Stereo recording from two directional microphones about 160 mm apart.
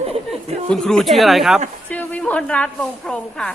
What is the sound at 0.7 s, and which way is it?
A woman's voice, 5° left (ahead or behind).